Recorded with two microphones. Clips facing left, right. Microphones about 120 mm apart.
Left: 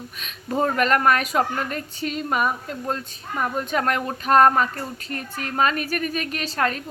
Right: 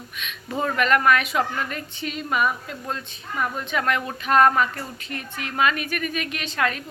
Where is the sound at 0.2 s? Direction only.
35° left (ahead or behind).